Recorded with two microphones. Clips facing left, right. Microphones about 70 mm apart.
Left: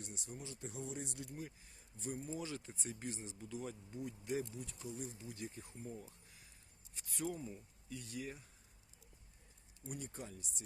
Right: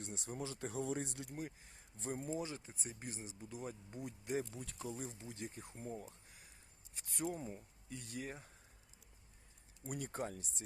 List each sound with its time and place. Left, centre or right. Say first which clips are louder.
0.2 s speech: right 5 dB; right
0.4 s speech: right 7 dB; right
2.4 s speech: even; right
4.5 s speech: right 1 dB; right
4.9 s speech: even; right
5.7 s speech: right 2 dB; right
9.8 s speech: right 5 dB; right